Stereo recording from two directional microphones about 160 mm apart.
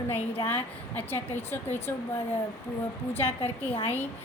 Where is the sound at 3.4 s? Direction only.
40° left (ahead or behind).